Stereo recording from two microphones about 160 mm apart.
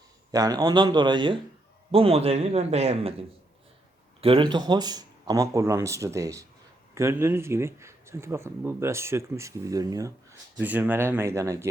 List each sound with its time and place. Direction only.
0.3 s a man's voice: 25° right (ahead or behind)
10.6 s speech: 10° right (ahead or behind)